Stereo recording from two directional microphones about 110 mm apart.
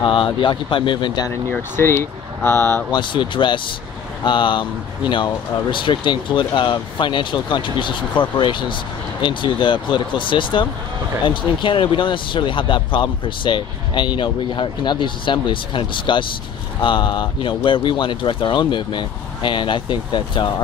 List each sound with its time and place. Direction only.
0.0 s speech: 50° left (ahead or behind)
1.5 s speech: 20° left (ahead or behind)
2.9 s speech: 45° left (ahead or behind)